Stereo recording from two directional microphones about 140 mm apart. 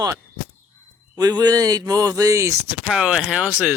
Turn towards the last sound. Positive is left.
turn(degrees=-10)  # may be behind; listen again after turning